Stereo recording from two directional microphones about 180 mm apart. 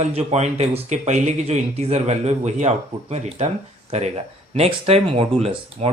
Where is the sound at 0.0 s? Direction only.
35° right (ahead or behind).